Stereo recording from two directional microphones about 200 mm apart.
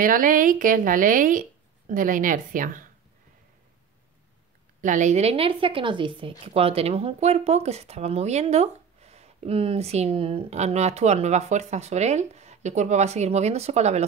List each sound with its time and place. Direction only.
0.0 s a woman's voice: 45° right (ahead or behind)
4.8 s a woman's voice: 40° right (ahead or behind)